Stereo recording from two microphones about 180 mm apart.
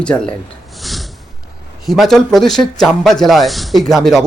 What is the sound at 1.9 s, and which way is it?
Speech, centre (ahead or behind).